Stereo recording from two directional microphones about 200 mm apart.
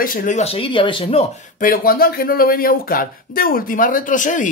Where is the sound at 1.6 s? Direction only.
45° left (ahead or behind).